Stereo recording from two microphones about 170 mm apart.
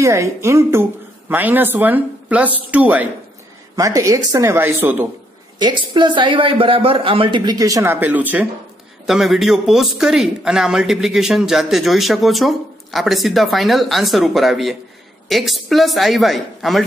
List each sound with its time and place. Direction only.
0.0 s a woman's voice: 15° right (ahead or behind)
3.7 s a woman's voice: 20° right (ahead or behind)
5.6 s a man's voice: 25° right (ahead or behind); by 16.8 s centre (ahead or behind)